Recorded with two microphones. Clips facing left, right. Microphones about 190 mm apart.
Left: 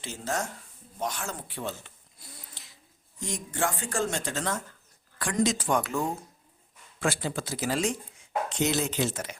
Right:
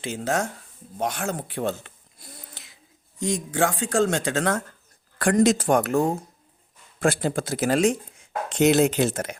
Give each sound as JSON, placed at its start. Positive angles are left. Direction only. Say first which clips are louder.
{"t": 0.0, "sound": "speech", "louder": "right 7 dB", "side_deg": -65}
{"t": 3.2, "sound": "speech", "louder": "right 7 dB", "side_deg": -75}
{"t": 5.5, "sound": "speech", "louder": "right 7 dB", "side_deg": -50}